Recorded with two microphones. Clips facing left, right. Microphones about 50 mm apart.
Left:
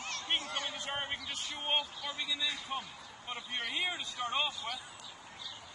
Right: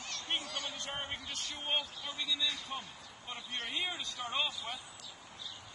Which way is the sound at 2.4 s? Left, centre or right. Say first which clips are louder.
Left 1 dB; left.